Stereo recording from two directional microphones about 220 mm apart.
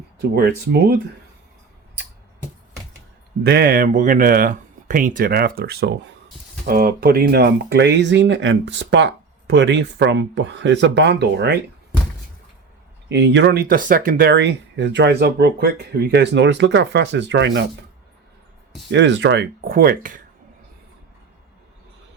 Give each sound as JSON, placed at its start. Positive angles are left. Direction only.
{"t": 0.2, "sound": "speech", "side_deg": -45}
{"t": 3.4, "sound": "speech", "side_deg": -45}
{"t": 13.1, "sound": "speech", "side_deg": -55}
{"t": 18.9, "sound": "speech", "side_deg": -55}